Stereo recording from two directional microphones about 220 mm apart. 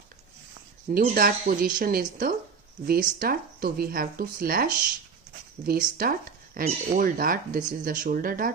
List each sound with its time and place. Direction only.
1.0 s speech: 40° right (ahead or behind)